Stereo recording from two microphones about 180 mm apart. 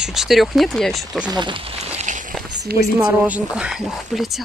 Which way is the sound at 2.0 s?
45° right (ahead or behind).